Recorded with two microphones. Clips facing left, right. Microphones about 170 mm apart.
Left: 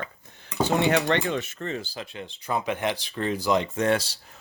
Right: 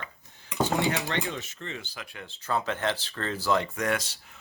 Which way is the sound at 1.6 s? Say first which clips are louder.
Left 7 dB; 35° left (ahead or behind).